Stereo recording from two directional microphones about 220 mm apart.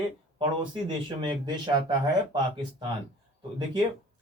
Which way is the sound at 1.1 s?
20° right (ahead or behind).